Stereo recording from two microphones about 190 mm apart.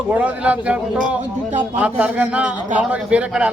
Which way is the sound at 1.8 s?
5° right (ahead or behind).